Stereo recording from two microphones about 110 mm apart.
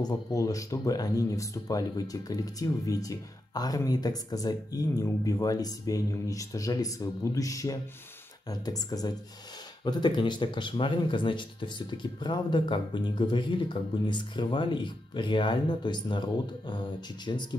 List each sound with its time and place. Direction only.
0.0 s speech: 35° left (ahead or behind)